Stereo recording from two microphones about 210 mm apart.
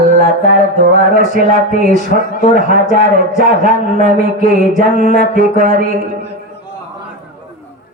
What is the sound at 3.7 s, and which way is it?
A man's voice, 40° right (ahead or behind).